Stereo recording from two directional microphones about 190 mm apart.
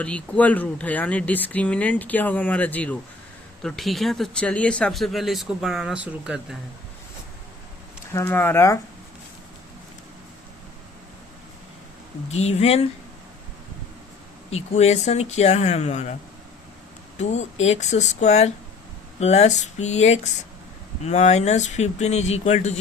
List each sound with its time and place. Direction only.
0.0 s speech: 5° left (ahead or behind)
8.1 s speech: 15° left (ahead or behind)
12.3 s speech: 35° left (ahead or behind)
14.5 s speech: 35° left (ahead or behind)
17.2 s speech: 35° left (ahead or behind)